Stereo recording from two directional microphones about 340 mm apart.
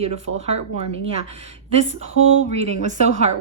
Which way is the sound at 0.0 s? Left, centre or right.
Centre.